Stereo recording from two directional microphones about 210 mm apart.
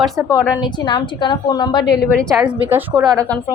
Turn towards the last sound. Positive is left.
turn(degrees=-20)  # may be behind; listen again after turning